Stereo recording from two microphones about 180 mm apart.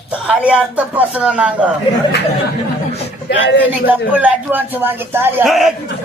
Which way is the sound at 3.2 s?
90° left.